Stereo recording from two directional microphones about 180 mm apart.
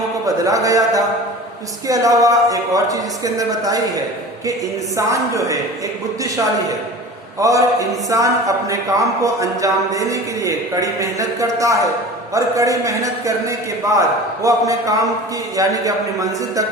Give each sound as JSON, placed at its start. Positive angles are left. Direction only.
{"t": 0.3, "sound": "a man's voice", "side_deg": -20}
{"t": 4.9, "sound": "a man's voice", "side_deg": -15}
{"t": 7.3, "sound": "a man's voice", "side_deg": -20}